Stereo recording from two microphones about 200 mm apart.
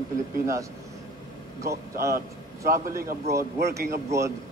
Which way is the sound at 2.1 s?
45° right (ahead or behind).